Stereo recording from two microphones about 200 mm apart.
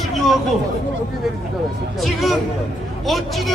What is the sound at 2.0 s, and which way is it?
Speech, centre (ahead or behind).